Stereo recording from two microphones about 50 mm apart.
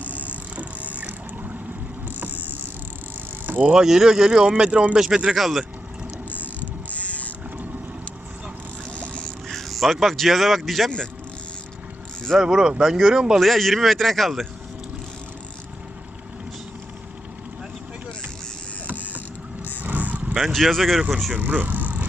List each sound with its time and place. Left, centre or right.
0.0 s vehicle: left
0.3 s vehicle: right
0.9 s boat: right
3.4 s vehicle: right
3.7 s speech: centre
4.9 s speech: centre
6.3 s vehicle: left
9.0 s a sound: centre
9.5 s speech: centre
12.4 s speech: centre
13.4 s speech: centre
19.8 s vehicle: right
20.5 s speech: centre
21.3 s speech: right